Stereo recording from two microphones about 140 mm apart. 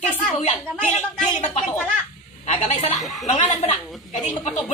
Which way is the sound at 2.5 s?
50° left (ahead or behind).